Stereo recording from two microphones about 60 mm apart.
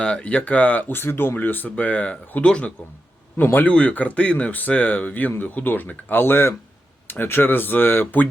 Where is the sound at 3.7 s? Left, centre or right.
Left.